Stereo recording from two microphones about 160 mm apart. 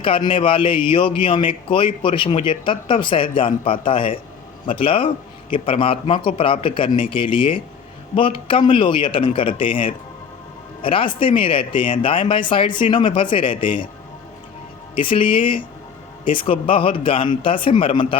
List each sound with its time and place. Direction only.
0.0 s a man's voice: 35° left (ahead or behind)
14.9 s a man's voice: 30° left (ahead or behind)